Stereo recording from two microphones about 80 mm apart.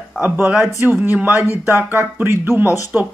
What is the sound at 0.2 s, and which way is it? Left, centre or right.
Speech, right.